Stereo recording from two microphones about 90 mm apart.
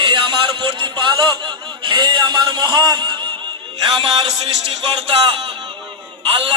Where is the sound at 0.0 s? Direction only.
60° right (ahead or behind).